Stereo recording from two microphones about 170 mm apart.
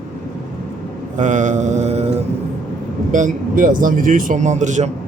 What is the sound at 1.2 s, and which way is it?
Speech, 45° right (ahead or behind).